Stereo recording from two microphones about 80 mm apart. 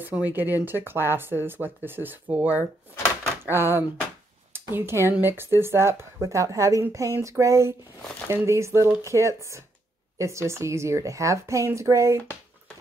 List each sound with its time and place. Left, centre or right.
0.0 s a woman's voice: right